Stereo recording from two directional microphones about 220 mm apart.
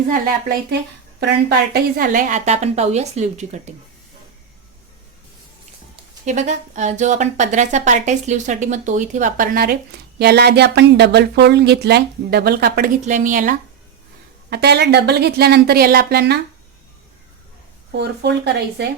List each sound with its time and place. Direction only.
1.2 s speech: 45° right (ahead or behind)
6.2 s speech: 30° right (ahead or behind)
14.5 s speech: 50° right (ahead or behind)
17.9 s speech: 50° right (ahead or behind)